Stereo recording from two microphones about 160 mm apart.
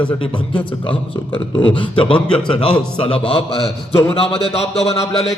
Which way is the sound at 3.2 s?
35° left (ahead or behind).